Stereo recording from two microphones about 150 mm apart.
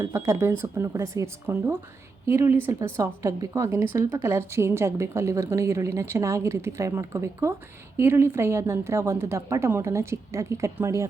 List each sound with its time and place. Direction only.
0.0 s a woman's voice: 20° right (ahead or behind)